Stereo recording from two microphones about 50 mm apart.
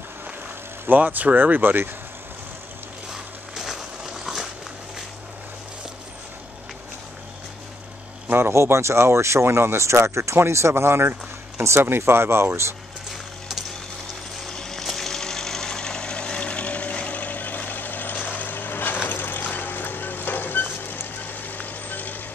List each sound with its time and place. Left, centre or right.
0.8 s speech: right
3.1 s a sound: centre
8.4 s speech: right
13.1 s music: centre
14.4 s vehicle: centre; by 22.2 s left